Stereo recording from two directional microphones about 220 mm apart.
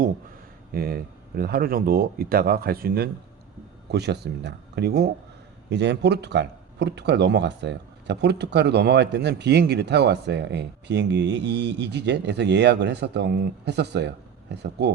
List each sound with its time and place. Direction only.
0.7 s speech: 45° right (ahead or behind)